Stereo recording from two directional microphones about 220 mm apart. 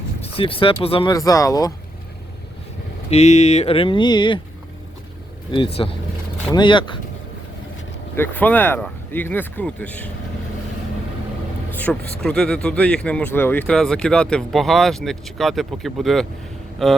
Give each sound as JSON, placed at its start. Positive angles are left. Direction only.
{"t": 0.2, "sound": "speech", "side_deg": 25}
{"t": 3.1, "sound": "speech", "side_deg": 30}
{"t": 5.5, "sound": "speech", "side_deg": 25}
{"t": 8.1, "sound": "speech", "side_deg": 10}
{"t": 11.7, "sound": "a sound", "side_deg": 5}
{"t": 12.2, "sound": "speech", "side_deg": 5}